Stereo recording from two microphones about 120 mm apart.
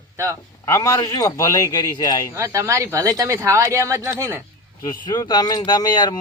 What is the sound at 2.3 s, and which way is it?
Speech, 25° right (ahead or behind).